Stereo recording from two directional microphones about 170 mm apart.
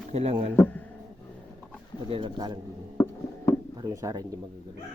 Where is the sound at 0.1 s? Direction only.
35° right (ahead or behind).